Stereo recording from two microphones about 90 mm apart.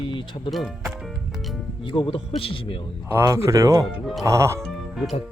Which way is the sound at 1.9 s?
75° left (ahead or behind).